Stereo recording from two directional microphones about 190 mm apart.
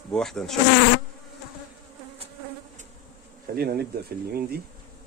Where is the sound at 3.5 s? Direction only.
55° right (ahead or behind).